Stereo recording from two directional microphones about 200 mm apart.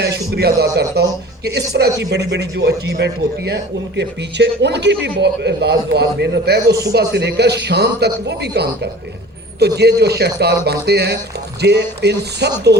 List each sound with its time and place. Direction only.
0.0 s a man's voice: 55° right (ahead or behind)